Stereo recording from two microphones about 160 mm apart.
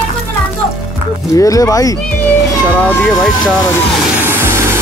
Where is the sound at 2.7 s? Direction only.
10° left (ahead or behind).